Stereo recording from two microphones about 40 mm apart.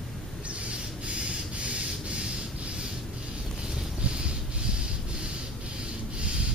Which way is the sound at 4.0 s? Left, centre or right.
Right.